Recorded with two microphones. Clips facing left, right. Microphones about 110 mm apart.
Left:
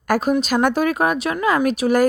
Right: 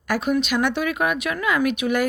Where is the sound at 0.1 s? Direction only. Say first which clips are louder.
Left 3 dB; 40° left (ahead or behind).